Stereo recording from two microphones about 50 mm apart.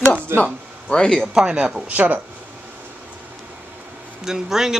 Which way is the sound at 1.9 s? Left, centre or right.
Right.